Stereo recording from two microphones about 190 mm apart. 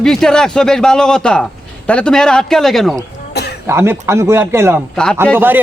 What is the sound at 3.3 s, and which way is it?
Cough, 60° left (ahead or behind).